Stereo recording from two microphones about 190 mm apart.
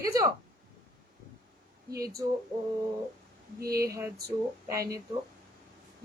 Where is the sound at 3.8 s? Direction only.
15° right (ahead or behind).